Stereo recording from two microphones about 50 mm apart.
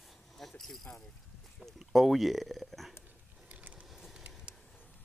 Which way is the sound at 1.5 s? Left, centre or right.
Centre.